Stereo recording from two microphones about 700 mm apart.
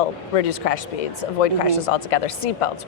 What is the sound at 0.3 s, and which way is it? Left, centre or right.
A woman's voice, left.